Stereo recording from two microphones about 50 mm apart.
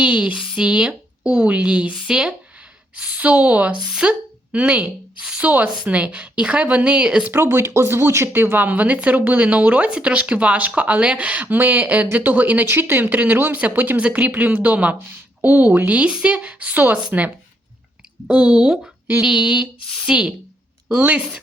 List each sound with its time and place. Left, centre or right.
0.0 s speech: right
1.4 s speech: right
4.0 s speech: centre
7.5 s speech: right
8.3 s speech: right
8.6 s speech: right
12.6 s speech: right
15.9 s speech: right
19.2 s a sound: centre
20.1 s speech: right